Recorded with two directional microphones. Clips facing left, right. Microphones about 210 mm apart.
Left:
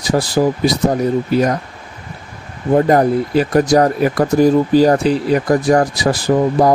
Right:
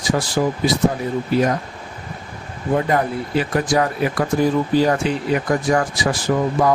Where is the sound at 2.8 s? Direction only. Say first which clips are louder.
Left 10 dB; 40° left (ahead or behind).